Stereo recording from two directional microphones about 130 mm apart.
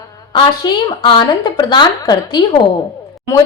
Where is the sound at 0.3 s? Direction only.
35° left (ahead or behind).